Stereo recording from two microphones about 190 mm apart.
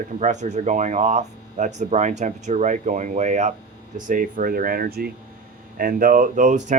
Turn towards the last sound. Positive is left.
turn(degrees=-40)  # may be behind; listen again after turning